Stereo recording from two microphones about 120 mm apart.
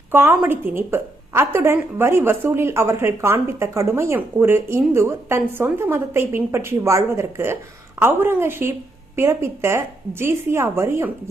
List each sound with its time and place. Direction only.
0.1 s a woman's voice: 20° right (ahead or behind)